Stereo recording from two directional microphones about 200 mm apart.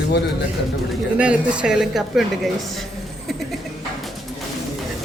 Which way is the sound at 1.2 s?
5° right (ahead or behind).